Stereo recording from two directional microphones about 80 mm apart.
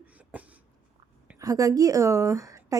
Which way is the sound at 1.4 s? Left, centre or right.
Right.